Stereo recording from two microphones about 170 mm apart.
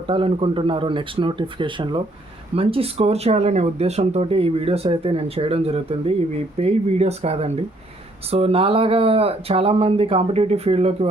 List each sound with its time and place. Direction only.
0.1 s speech: 30° right (ahead or behind)